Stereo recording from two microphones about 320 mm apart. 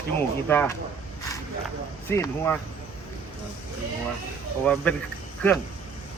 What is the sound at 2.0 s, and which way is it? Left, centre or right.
Speech, centre.